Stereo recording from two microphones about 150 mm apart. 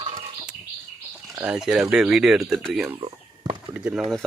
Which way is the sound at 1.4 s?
5° right (ahead or behind).